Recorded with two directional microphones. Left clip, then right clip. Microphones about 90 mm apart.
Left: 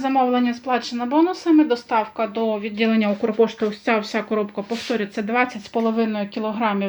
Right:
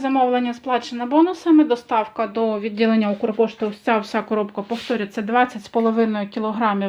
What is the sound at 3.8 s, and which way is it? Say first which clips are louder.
Speech: right 3 dB; 25° right (ahead or behind).